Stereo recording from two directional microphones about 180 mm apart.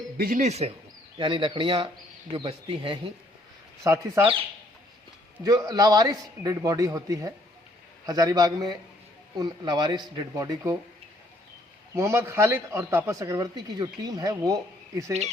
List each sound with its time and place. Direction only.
0.2 s speech: 50° right (ahead or behind)
1.2 s a man's voice: 25° right (ahead or behind)
3.8 s speech: 15° right (ahead or behind)
5.4 s a man's voice: 20° right (ahead or behind)
11.9 s speech: 15° right (ahead or behind)